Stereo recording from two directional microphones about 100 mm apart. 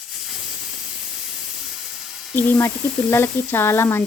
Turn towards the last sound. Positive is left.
turn(degrees=25)  # may be behind; listen again after turning